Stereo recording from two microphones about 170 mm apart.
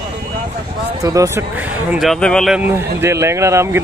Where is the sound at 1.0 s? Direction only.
20° right (ahead or behind); by 2.5 s 5° left (ahead or behind).